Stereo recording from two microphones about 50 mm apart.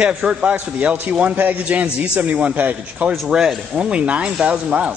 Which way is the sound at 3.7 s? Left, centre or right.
Right.